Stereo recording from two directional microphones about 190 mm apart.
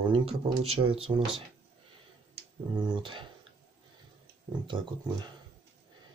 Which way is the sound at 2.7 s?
25° right (ahead or behind).